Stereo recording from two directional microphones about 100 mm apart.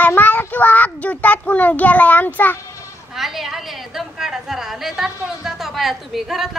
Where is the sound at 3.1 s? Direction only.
Centre (ahead or behind).